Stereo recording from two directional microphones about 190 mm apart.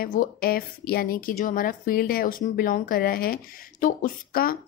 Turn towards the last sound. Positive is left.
turn(degrees=50)  # may be behind; listen again after turning